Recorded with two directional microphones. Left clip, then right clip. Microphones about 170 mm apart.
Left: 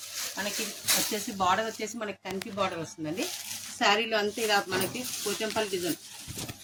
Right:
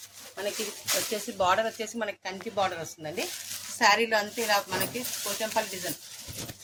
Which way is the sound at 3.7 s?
65° right (ahead or behind).